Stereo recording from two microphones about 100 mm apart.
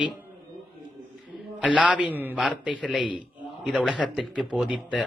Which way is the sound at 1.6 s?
10° right (ahead or behind).